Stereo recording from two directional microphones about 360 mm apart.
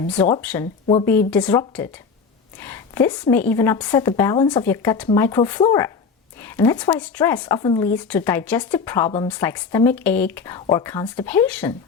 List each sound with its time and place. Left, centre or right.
0.2 s a woman's voice: centre